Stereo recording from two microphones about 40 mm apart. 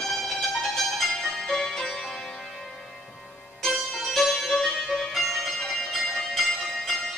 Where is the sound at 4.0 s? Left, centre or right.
Centre.